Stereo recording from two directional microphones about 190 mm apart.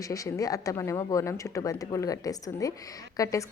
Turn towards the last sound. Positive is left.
turn(degrees=20)  # may be behind; listen again after turning